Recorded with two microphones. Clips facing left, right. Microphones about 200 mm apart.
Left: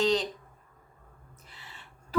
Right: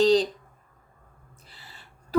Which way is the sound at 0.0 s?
35° right (ahead or behind).